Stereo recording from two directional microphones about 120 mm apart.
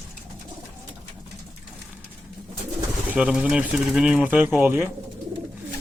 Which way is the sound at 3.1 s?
5° right (ahead or behind).